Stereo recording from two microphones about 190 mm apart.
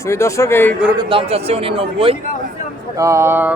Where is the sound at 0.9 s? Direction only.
30° right (ahead or behind).